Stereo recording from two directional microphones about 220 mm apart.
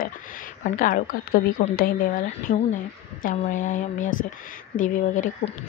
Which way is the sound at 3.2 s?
35° left (ahead or behind).